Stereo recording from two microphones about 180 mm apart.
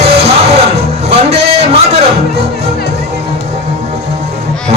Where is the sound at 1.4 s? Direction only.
35° right (ahead or behind).